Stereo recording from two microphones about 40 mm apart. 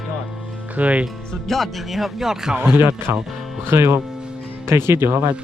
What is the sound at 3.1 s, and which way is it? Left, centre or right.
Speech, right.